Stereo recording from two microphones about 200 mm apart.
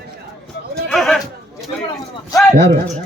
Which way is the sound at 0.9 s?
Centre (ahead or behind).